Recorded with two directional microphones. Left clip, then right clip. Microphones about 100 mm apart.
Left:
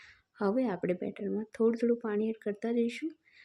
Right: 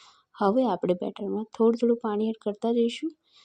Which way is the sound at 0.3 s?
40° right (ahead or behind).